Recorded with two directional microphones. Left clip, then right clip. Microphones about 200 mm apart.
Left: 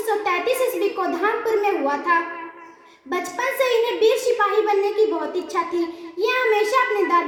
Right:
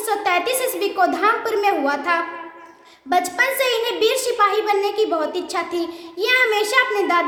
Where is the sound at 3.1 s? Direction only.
15° right (ahead or behind).